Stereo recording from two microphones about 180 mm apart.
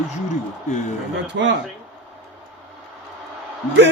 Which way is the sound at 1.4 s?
90° right.